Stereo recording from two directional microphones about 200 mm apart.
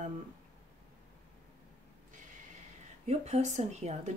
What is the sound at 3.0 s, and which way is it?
A woman's voice, 35° right (ahead or behind).